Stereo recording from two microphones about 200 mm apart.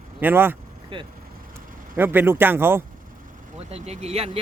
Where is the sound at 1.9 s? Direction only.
10° right (ahead or behind).